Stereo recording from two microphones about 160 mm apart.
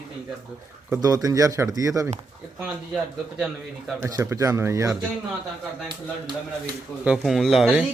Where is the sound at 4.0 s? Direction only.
20° right (ahead or behind).